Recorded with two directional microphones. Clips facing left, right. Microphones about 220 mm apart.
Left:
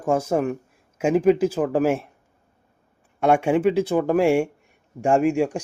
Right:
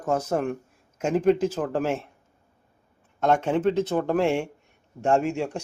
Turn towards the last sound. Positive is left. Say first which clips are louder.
# left 4 dB
turn(degrees=15)  # may be behind; listen again after turning